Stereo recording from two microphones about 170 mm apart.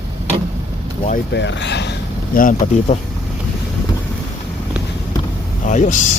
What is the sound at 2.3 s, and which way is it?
Speech, 60° left (ahead or behind).